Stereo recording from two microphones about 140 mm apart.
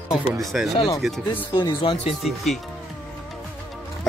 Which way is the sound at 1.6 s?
30° left (ahead or behind).